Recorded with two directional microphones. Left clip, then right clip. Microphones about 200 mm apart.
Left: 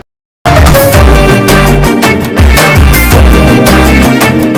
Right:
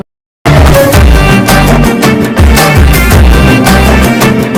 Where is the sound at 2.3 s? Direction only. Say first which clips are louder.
Left 1 dB; centre (ahead or behind).